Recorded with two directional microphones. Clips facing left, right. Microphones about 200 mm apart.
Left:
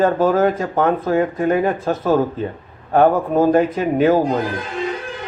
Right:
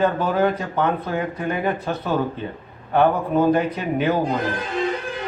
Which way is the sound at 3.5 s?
45° left (ahead or behind).